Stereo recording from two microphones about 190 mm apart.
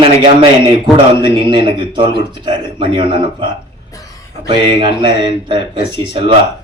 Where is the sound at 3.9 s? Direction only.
15° left (ahead or behind).